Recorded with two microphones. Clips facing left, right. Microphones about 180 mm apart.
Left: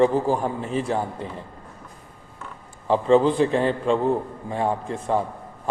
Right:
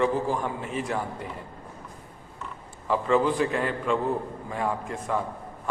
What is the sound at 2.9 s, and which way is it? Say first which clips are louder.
A man's voice: left 5 dB; 30° left (ahead or behind).